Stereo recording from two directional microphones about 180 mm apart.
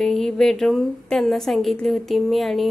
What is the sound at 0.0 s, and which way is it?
A woman's voice, centre (ahead or behind).